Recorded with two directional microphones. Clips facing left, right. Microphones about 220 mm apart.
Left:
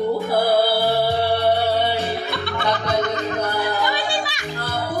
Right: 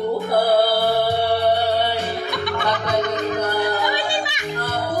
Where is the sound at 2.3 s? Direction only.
15° right (ahead or behind).